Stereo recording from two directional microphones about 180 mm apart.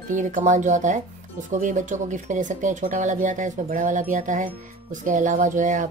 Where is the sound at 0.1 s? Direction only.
45° right (ahead or behind).